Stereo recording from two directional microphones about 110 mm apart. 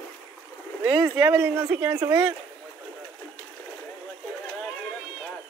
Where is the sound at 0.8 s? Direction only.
20° right (ahead or behind).